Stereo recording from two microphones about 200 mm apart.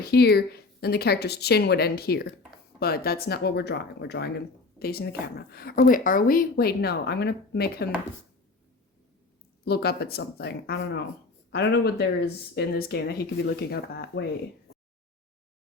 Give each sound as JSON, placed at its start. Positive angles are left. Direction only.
{"t": 0.0, "sound": "speech", "side_deg": 55}
{"t": 9.6, "sound": "speech", "side_deg": 50}